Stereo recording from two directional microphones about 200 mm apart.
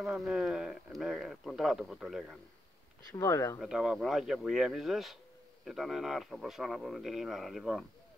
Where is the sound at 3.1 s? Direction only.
15° left (ahead or behind).